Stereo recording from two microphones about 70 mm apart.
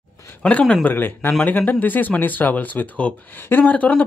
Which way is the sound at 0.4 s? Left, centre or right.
Centre.